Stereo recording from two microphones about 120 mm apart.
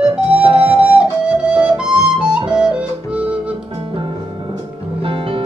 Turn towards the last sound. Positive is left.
turn(degrees=-45)  # may be behind; listen again after turning